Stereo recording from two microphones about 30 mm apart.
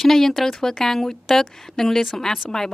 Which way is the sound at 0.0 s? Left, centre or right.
Centre.